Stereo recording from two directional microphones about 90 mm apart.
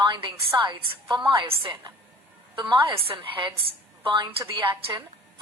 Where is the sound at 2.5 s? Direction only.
60° right (ahead or behind).